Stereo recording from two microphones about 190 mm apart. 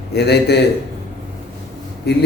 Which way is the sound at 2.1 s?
60° left (ahead or behind).